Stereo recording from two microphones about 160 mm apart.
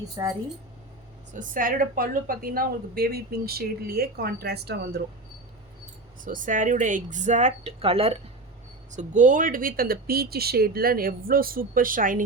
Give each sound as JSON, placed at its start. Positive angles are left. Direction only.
{"t": 0.2, "sound": "speech", "side_deg": -25}
{"t": 1.3, "sound": "a woman's voice", "side_deg": -55}
{"t": 6.2, "sound": "speech", "side_deg": -55}
{"t": 8.9, "sound": "speech", "side_deg": -50}